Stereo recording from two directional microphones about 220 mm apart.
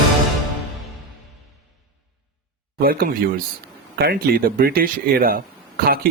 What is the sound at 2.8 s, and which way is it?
Speech, 40° right (ahead or behind).